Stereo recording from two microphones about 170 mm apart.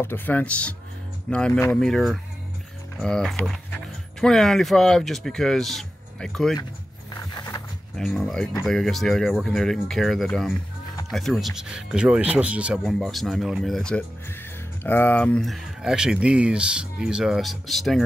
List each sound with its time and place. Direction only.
0.0 s speech: 10° left (ahead or behind)
7.2 s a sound: 20° left (ahead or behind)
8.0 s speech: centre (ahead or behind)